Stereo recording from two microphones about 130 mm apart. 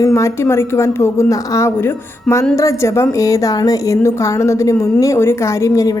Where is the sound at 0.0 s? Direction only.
20° left (ahead or behind).